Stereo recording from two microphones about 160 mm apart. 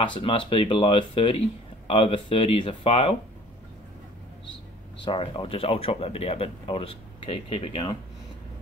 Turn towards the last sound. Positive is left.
turn(degrees=35)  # may be behind; listen again after turning